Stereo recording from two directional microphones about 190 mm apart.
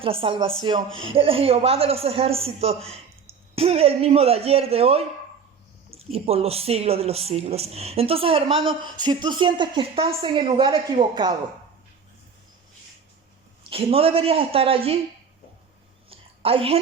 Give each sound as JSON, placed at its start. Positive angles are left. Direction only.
{"t": 0.0, "sound": "a woman's voice", "side_deg": -30}
{"t": 0.9, "sound": "speech", "side_deg": -90}
{"t": 1.1, "sound": "a woman's voice", "side_deg": -30}
{"t": 13.7, "sound": "speech", "side_deg": -30}
{"t": 16.0, "sound": "a sound", "side_deg": -30}